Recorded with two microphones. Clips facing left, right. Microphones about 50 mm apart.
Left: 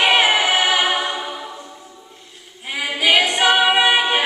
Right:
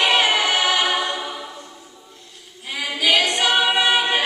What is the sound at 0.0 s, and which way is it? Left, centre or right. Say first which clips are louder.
Music: left 2 dB; centre.